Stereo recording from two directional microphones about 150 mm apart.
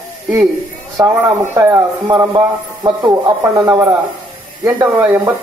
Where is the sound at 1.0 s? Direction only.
20° right (ahead or behind).